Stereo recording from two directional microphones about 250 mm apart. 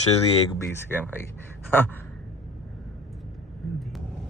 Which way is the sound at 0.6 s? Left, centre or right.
Centre.